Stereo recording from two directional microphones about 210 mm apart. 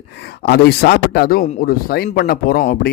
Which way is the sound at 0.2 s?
50° left (ahead or behind).